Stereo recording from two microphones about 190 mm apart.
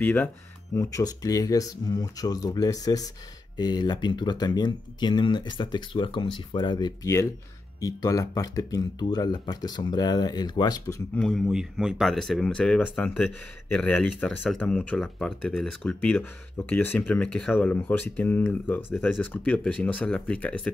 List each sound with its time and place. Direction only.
0.0 s speech: 10° left (ahead or behind)
11.1 s speech: centre (ahead or behind)